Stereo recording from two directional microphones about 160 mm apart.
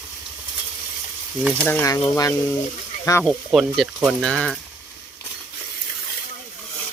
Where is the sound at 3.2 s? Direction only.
Centre (ahead or behind).